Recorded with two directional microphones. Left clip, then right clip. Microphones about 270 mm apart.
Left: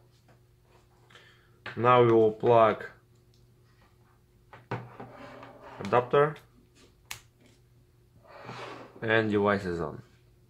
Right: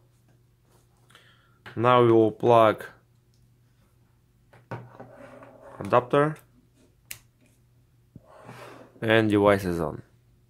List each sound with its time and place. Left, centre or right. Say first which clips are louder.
1.8 s speech: right 2 dB; right
5.9 s speech: right 2 dB; right
9.0 s speech: right 5 dB; right